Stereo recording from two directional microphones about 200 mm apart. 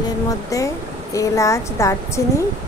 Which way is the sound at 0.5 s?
15° left (ahead or behind).